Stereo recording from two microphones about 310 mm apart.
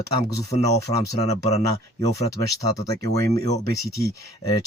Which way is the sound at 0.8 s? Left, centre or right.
Centre.